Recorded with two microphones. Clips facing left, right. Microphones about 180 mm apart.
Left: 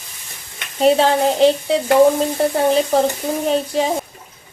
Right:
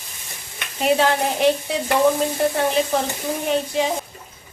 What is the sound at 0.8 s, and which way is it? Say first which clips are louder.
Speech: left 5 dB; 30° left (ahead or behind).